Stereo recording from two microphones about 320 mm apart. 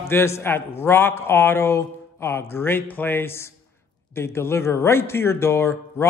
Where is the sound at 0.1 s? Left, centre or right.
Centre.